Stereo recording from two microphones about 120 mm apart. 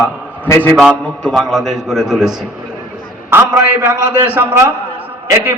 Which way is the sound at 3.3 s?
20° right (ahead or behind).